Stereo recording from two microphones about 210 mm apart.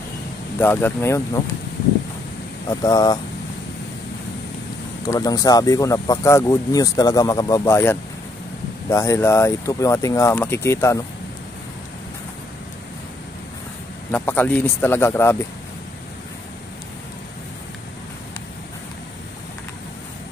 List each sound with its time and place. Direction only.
0.6 s speech: 10° left (ahead or behind)
2.7 s speech: 20° left (ahead or behind)
5.0 s speech: 15° left (ahead or behind)
14.1 s speech: 10° left (ahead or behind)